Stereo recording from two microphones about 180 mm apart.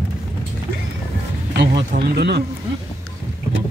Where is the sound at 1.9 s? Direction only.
65° right (ahead or behind).